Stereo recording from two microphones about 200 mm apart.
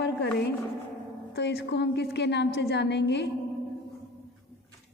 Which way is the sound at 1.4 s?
60° left (ahead or behind).